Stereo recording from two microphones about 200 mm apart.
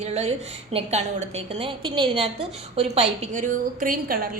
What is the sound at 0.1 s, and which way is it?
A woman's voice, 30° right (ahead or behind).